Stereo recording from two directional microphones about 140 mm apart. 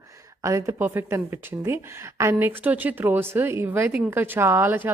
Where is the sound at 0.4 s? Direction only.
20° right (ahead or behind).